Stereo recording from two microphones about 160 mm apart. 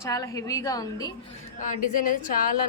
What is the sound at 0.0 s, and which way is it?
A woman's voice, 20° left (ahead or behind).